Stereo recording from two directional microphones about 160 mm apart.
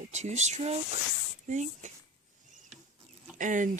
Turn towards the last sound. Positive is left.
turn(degrees=-55)  # may be behind; listen again after turning